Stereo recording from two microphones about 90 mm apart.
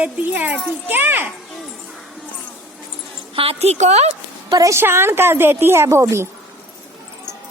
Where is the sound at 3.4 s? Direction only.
90° right.